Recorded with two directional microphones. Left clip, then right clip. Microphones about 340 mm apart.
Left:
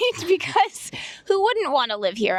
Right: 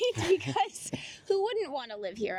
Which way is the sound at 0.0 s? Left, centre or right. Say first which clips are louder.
Left 6 dB; left.